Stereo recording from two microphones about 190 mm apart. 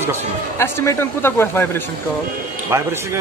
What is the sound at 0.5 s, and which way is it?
Speech, 15° left (ahead or behind).